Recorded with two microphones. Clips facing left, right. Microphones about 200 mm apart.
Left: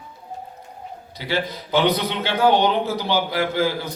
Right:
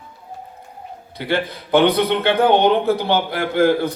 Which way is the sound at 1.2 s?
55° right (ahead or behind).